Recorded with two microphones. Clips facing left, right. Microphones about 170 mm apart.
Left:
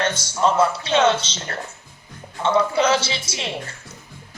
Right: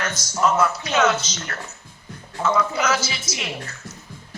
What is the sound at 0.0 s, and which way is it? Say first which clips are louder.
A man's voice: left 2 dB; 30° left (ahead or behind).